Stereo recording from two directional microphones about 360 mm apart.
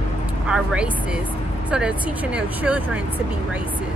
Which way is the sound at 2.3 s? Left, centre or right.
Centre.